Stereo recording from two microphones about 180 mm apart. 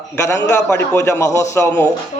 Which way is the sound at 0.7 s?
15° left (ahead or behind).